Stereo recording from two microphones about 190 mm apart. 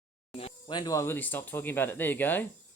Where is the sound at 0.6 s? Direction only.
20° left (ahead or behind).